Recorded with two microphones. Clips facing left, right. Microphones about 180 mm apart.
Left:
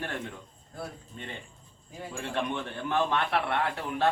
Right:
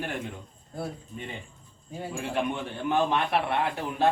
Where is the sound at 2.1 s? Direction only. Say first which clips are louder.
Right 2 dB; 10° right (ahead or behind).